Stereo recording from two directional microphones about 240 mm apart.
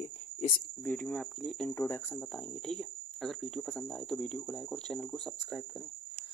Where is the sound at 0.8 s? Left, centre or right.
Centre.